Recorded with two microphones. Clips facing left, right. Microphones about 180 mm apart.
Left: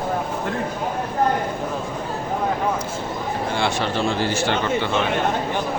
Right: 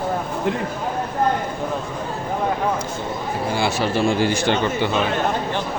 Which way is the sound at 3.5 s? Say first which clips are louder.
Right 3 dB; 5° right (ahead or behind).